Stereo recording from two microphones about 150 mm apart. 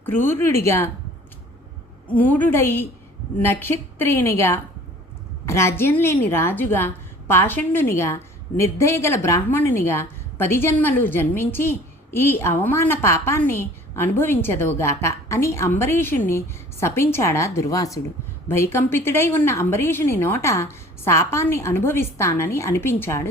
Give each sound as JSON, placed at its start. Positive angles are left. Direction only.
{"t": 0.0, "sound": "a woman's voice", "side_deg": 15}
{"t": 2.1, "sound": "a woman's voice", "side_deg": 10}